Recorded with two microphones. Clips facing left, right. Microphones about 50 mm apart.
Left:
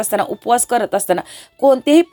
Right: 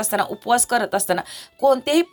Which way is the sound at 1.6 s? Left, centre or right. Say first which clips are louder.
Left 4 dB; centre.